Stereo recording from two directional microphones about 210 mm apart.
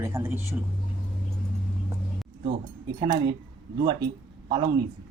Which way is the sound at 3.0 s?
20° right (ahead or behind).